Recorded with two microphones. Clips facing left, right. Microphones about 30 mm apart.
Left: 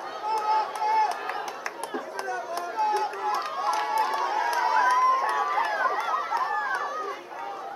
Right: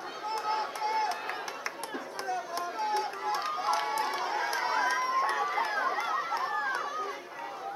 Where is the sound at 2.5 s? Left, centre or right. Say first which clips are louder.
Left 8 dB; centre.